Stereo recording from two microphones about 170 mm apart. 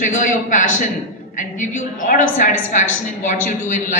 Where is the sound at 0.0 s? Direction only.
50° left (ahead or behind).